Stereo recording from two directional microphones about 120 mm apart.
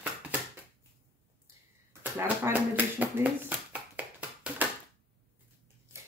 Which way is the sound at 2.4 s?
15° right (ahead or behind).